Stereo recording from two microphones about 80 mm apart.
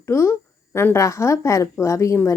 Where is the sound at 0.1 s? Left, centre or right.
Left.